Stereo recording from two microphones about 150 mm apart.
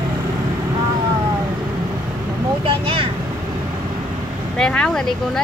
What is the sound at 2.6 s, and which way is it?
Vehicle, 35° right (ahead or behind).